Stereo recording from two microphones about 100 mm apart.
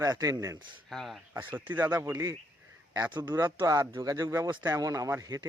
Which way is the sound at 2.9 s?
45° right (ahead or behind).